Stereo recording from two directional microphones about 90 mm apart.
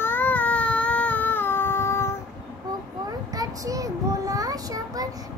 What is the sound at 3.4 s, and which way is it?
Child singing, 40° right (ahead or behind).